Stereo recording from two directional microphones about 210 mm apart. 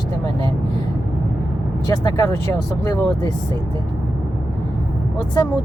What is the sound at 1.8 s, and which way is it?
Speech, 15° left (ahead or behind).